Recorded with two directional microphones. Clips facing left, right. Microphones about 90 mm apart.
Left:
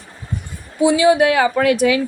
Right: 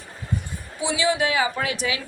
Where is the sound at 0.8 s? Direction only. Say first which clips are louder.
Left 10 dB; 45° left (ahead or behind).